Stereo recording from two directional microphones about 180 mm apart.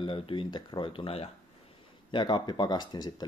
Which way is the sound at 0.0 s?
30° left (ahead or behind).